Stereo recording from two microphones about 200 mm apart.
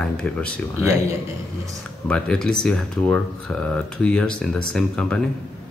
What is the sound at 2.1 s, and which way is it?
Speech, 5° left (ahead or behind).